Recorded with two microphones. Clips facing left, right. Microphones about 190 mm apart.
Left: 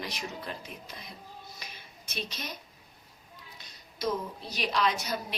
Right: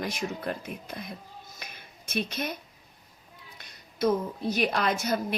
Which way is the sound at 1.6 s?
55° right (ahead or behind).